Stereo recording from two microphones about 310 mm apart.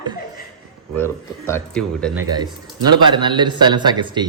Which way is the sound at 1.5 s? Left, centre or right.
Centre.